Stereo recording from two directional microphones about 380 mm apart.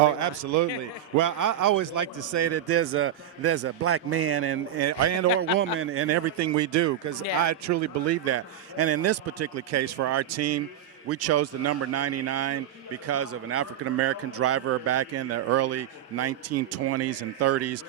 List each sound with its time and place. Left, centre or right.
0.4 s a man's voice: right
2.4 s a man's voice: right